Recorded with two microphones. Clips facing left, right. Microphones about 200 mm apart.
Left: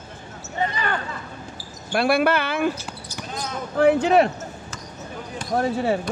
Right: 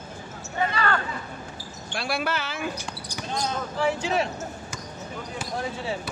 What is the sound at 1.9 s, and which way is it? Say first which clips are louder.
Speech: left 9 dB; 55° left (ahead or behind).